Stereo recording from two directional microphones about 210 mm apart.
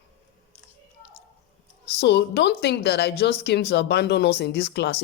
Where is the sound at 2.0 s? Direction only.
55° left (ahead or behind).